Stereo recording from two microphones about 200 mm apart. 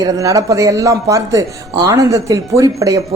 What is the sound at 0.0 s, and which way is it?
A man's voice, 15° right (ahead or behind).